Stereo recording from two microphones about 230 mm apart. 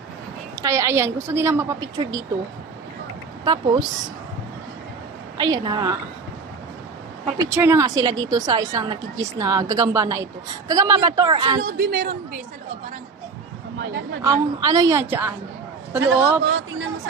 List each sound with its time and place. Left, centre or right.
0.6 s a woman's voice: centre
3.4 s speech: centre
5.4 s a woman's voice: centre
7.3 s a woman's voice: centre
11.6 s a woman's voice: right
14.2 s a woman's voice: centre